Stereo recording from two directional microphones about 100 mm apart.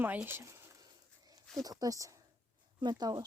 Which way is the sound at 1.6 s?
40° right (ahead or behind).